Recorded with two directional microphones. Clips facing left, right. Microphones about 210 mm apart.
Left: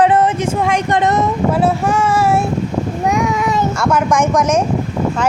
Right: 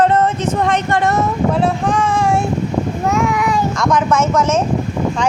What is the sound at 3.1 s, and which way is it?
Child singing, 20° left (ahead or behind).